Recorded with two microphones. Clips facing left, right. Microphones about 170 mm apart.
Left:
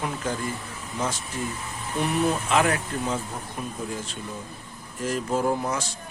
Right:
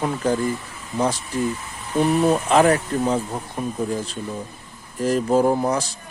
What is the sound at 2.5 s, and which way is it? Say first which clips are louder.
A man's voice: right 7 dB; 40° right (ahead or behind).